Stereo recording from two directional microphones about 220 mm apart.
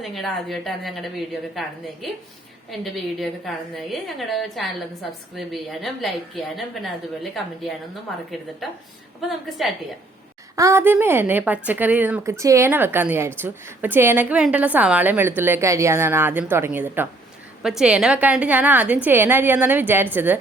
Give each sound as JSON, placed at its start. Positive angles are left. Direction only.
{"t": 0.0, "sound": "a woman's voice", "side_deg": 0}
{"t": 10.5, "sound": "a woman's voice", "side_deg": -15}